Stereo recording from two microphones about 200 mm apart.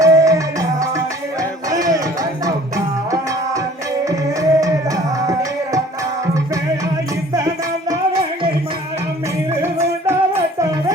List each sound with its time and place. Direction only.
0.0 s music: 15° right (ahead or behind)
7.3 s music: 15° right (ahead or behind)
9.6 s music: 10° right (ahead or behind)